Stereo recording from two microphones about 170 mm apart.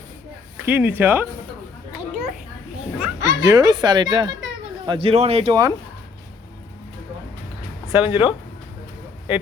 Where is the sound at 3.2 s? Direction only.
20° right (ahead or behind).